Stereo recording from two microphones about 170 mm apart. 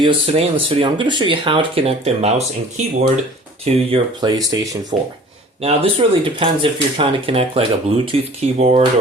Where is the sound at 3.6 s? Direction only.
30° right (ahead or behind).